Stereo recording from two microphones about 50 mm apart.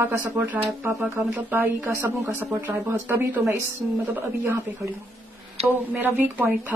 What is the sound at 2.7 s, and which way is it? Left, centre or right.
Speech, right.